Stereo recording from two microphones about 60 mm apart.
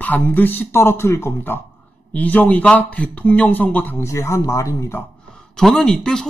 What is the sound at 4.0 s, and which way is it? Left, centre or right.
Speech, left.